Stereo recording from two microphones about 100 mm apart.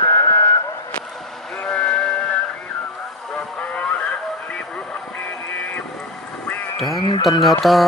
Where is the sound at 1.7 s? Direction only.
10° left (ahead or behind).